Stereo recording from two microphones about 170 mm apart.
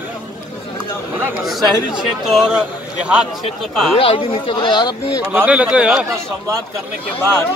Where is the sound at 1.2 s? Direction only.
5° right (ahead or behind).